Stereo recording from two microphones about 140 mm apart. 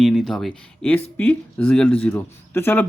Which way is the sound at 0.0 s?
Centre (ahead or behind).